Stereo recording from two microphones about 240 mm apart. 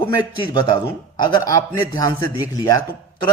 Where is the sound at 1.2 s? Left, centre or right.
Centre.